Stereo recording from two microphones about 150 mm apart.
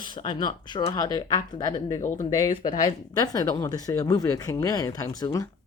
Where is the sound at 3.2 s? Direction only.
25° left (ahead or behind).